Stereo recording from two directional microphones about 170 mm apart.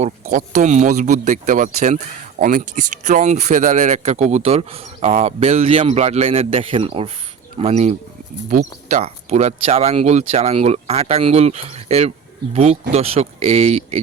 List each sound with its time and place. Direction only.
0.0 s speech: 45° right (ahead or behind)
8.4 s speech: 50° right (ahead or behind)
9.0 s speech: 40° right (ahead or behind)